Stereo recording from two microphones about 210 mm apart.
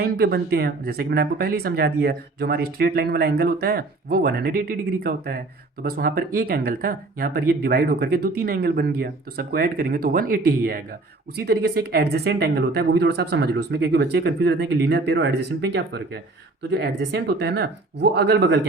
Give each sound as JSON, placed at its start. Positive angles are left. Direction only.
{"t": 0.0, "sound": "speech", "side_deg": -50}